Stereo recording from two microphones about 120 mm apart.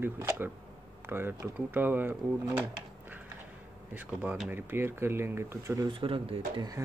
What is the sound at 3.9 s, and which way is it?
Speech, 15° right (ahead or behind).